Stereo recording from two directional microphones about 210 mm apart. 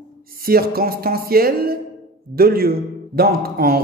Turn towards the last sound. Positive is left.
turn(degrees=-45)  # may be behind; listen again after turning